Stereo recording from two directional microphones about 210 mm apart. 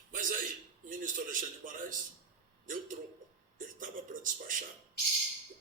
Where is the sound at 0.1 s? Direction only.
40° right (ahead or behind).